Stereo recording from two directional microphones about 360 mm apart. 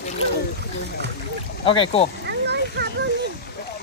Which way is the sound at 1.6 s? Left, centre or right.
Centre.